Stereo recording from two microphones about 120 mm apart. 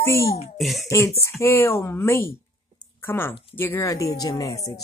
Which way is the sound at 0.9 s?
25° left (ahead or behind).